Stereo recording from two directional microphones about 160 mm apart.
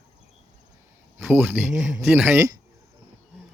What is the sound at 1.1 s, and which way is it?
Speech, 10° right (ahead or behind).